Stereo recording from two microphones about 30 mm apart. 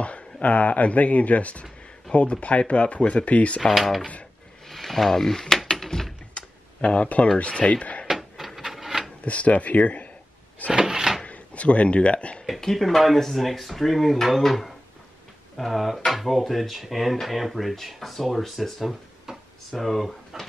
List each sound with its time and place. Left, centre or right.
0.0 s speech: left
2.1 s speech: left
3.7 s speech: centre
5.7 s a sound: centre
6.3 s computer keyboard: left
7.3 s speech: left
8.1 s a sound: centre
9.2 s speech: left
10.7 s cupboard open or close: right
11.2 s speech: left
12.7 s speech: centre
15.5 s speech: centre
19.3 s a sound: centre
19.8 s speech: centre